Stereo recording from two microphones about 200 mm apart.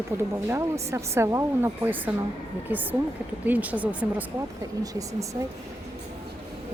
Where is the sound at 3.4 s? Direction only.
10° right (ahead or behind).